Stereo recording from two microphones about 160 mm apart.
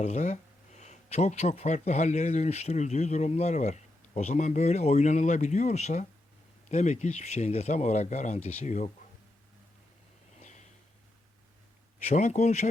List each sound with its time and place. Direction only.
0.0 s speech: 45° left (ahead or behind)
10.4 s snort: 45° left (ahead or behind)
12.0 s speech: 45° left (ahead or behind)